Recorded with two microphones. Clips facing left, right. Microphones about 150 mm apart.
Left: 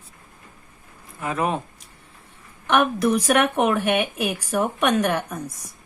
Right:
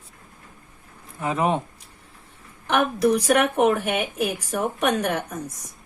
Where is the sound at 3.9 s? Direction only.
70° left (ahead or behind).